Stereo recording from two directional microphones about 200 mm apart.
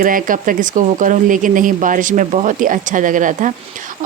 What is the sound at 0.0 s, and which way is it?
A woman's voice, 45° right (ahead or behind).